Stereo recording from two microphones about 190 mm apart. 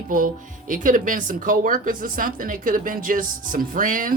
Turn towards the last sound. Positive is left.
turn(degrees=-45)  # may be behind; listen again after turning